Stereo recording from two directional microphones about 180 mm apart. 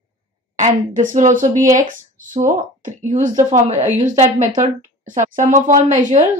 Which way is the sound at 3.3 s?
20° right (ahead or behind).